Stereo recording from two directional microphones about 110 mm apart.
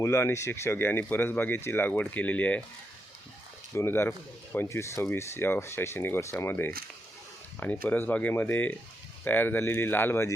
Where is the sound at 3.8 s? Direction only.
20° left (ahead or behind).